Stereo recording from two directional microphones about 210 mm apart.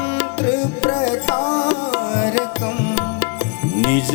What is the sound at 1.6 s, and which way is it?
Music, 10° left (ahead or behind).